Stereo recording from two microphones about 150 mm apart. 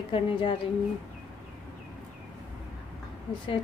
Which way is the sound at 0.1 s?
35° left (ahead or behind).